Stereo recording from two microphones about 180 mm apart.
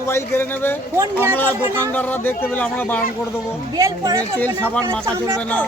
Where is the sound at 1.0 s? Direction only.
15° right (ahead or behind).